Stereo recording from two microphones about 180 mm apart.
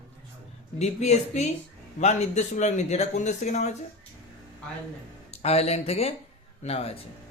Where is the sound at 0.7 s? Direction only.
40° left (ahead or behind).